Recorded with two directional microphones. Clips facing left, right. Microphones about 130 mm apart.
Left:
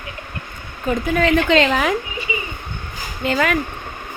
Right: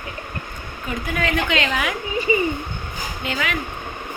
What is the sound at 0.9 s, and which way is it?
A woman's voice, 35° left (ahead or behind).